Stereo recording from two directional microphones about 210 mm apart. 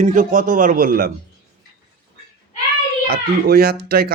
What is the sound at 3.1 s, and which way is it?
Speech, 45° right (ahead or behind).